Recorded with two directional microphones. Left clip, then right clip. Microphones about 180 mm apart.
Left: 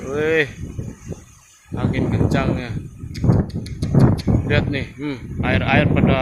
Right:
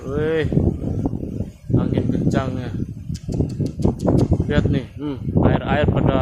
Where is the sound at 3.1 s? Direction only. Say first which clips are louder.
Left 5 dB; 10° right (ahead or behind).